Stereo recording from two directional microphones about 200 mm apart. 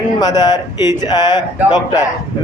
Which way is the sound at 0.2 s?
20° left (ahead or behind).